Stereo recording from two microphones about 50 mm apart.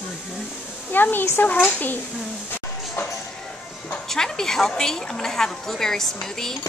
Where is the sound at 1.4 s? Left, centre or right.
Left.